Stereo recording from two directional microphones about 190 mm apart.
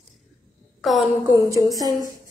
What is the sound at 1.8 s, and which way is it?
Speech, 20° right (ahead or behind).